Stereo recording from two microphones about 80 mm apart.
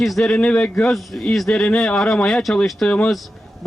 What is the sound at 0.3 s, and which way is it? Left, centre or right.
A man's voice, centre.